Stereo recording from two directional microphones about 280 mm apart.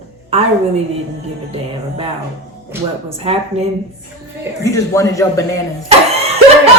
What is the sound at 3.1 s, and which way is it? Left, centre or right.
Speech, right.